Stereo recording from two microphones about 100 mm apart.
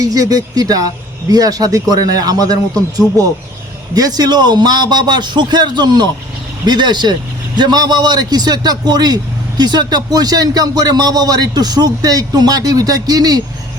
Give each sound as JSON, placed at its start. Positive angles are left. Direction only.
{"t": 0.0, "sound": "a man's voice", "side_deg": -40}